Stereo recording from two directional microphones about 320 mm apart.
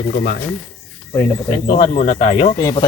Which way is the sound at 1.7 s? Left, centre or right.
Centre.